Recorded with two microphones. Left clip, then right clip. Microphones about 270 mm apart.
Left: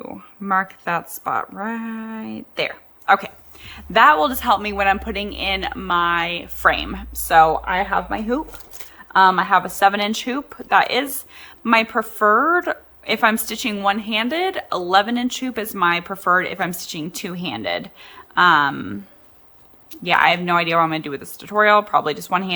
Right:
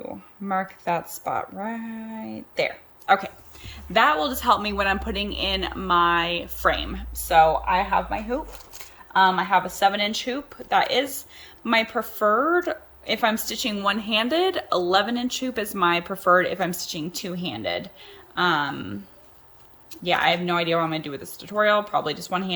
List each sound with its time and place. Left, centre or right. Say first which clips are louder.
0.0 s speech: left 2 dB; centre